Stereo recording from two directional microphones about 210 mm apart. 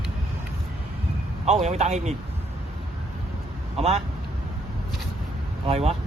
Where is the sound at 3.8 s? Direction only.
30° right (ahead or behind).